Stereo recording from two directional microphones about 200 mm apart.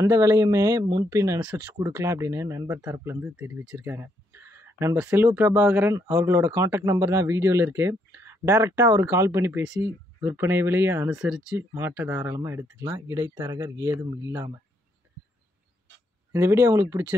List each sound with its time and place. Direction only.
0.0 s speech: 15° right (ahead or behind)
11.1 s speech: 5° right (ahead or behind)
16.3 s speech: 15° right (ahead or behind)